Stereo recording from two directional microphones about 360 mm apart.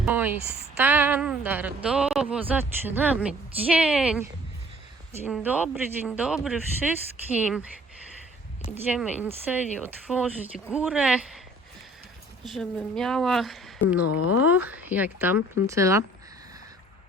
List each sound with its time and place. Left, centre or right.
0.0 s a man's voice: centre
0.4 s speech: right
0.8 s a man's voice: centre
8.7 s a man's voice: centre
12.5 s a man's voice: centre
14.1 s speech: left
14.4 s a man's voice: centre